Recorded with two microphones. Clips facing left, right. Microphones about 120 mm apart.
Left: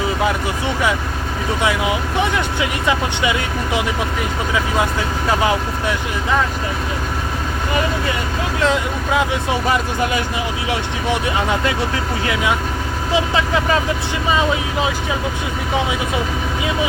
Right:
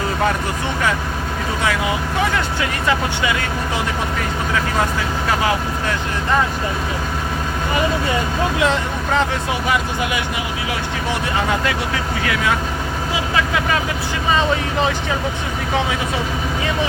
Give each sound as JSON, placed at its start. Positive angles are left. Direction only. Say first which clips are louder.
{"t": 1.6, "sound": "speech", "louder": "left 2 dB", "side_deg": 20}
{"t": 8.6, "sound": "speech", "louder": "left 1 dB", "side_deg": 5}
{"t": 12.2, "sound": "speech", "louder": "even", "side_deg": 25}